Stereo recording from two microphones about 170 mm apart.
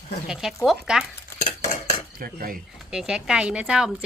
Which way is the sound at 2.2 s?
60° right (ahead or behind).